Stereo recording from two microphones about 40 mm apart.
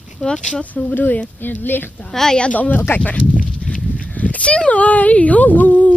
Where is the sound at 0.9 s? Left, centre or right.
Left.